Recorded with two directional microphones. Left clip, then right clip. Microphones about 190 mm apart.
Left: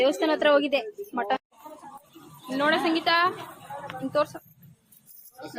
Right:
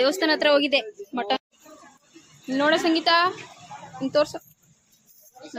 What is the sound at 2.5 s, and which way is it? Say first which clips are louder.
A woman's voice: right 3 dB; 35° right (ahead or behind).